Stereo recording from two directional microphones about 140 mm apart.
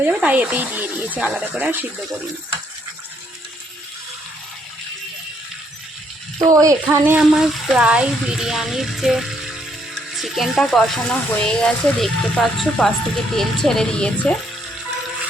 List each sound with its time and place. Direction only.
0.0 s speech: 10° right (ahead or behind)
6.5 s speech: 25° right (ahead or behind)
7.2 s speech: 5° right (ahead or behind)